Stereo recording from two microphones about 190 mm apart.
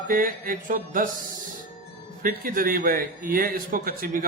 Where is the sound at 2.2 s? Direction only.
50° right (ahead or behind).